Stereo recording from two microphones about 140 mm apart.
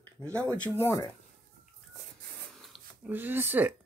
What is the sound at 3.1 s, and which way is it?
Speech, 15° right (ahead or behind).